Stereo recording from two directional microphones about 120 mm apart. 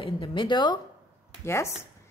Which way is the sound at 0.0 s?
45° left (ahead or behind).